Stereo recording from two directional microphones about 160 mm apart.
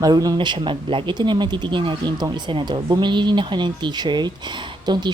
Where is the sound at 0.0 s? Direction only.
20° right (ahead or behind).